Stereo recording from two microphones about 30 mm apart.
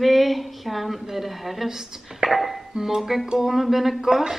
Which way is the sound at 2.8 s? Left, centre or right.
Centre.